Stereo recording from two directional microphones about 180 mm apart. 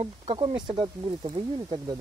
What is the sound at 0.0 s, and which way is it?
Speech, 30° right (ahead or behind).